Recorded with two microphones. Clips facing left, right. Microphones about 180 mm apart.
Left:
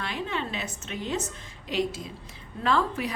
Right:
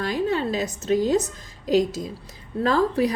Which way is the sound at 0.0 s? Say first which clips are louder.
Right 8 dB; 40° right (ahead or behind).